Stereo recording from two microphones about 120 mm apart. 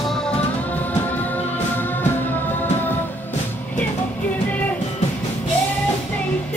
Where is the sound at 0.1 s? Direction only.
10° left (ahead or behind).